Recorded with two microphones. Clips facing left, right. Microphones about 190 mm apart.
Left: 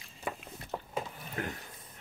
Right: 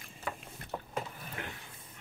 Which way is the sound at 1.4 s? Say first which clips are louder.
Left 7 dB; 40° left (ahead or behind).